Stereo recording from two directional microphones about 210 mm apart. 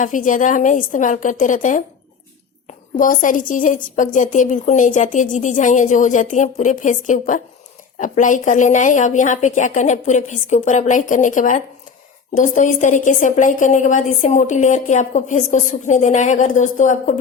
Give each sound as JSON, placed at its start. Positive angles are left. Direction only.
{"t": 0.0, "sound": "a woman's voice", "side_deg": 40}
{"t": 3.0, "sound": "a woman's voice", "side_deg": 40}